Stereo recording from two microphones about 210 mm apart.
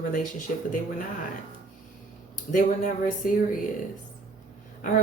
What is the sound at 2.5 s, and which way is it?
Speech, 40° left (ahead or behind).